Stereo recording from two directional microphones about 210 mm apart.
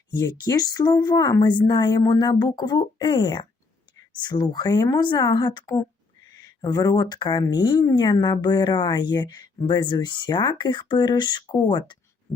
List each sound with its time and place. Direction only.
0.1 s speech: 20° left (ahead or behind)